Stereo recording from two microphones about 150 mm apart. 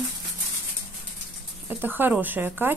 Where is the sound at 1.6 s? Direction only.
15° right (ahead or behind).